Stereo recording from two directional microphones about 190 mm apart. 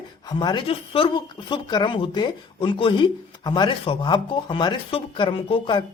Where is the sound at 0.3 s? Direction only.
25° left (ahead or behind).